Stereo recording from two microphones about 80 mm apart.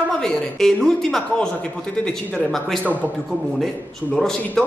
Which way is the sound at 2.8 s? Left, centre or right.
Right.